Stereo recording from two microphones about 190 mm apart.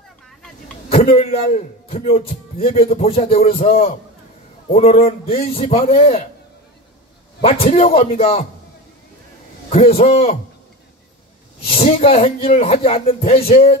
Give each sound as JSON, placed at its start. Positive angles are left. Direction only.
{"t": 0.8, "sound": "a man's voice", "side_deg": 30}
{"t": 7.7, "sound": "a man's voice", "side_deg": 30}
{"t": 9.7, "sound": "a man's voice", "side_deg": 35}
{"t": 11.6, "sound": "a man's voice", "side_deg": 30}